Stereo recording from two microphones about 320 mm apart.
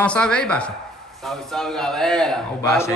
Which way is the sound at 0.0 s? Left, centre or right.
Centre.